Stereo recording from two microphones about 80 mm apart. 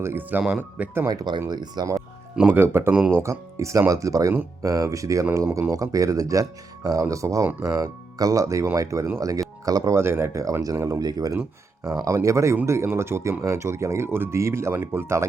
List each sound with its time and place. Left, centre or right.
0.0 s speech: right
0.4 s speech: centre
1.0 s speech: right
2.5 s speech: right
2.9 s speech: centre
3.2 s speech: right
10.0 s speech: right
10.4 s speech: right
11.0 s speech: right
12.0 s speech: right